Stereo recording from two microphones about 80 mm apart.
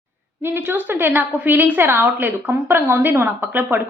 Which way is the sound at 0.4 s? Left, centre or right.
Right.